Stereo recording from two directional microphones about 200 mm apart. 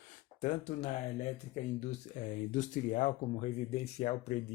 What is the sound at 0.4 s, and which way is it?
Speech, 35° left (ahead or behind).